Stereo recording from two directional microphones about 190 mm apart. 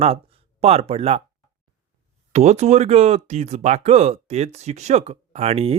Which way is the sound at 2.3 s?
35° right (ahead or behind).